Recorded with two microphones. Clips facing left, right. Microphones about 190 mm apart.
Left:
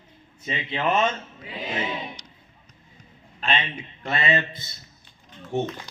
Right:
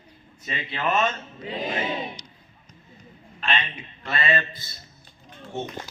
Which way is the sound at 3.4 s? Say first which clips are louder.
Left 1 dB; 20° left (ahead or behind).